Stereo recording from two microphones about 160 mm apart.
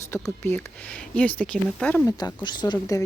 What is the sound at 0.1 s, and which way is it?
Speech, 10° left (ahead or behind).